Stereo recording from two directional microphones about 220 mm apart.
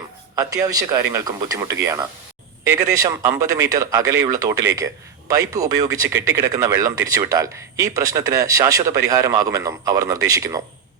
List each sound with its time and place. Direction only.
0.3 s speech: 15° right (ahead or behind)